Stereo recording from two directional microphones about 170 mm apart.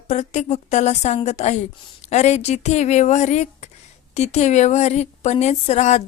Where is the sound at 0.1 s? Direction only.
40° left (ahead or behind).